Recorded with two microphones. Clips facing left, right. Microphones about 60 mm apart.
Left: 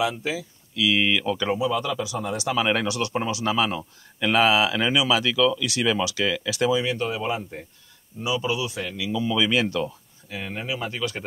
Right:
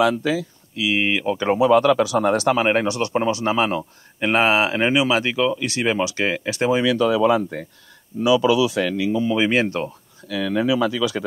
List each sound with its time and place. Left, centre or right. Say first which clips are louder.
0.0 s speech: right 7 dB; right
0.7 s speech: right 1 dB; right
1.5 s speech: right 13 dB; right
2.5 s speech: right 4 dB; right
6.8 s speech: right 9 dB; right
8.9 s speech: right 5 dB; right
10.2 s speech: right 11 dB; right